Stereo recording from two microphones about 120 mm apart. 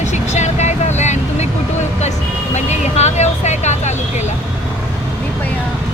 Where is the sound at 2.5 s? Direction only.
70° left (ahead or behind).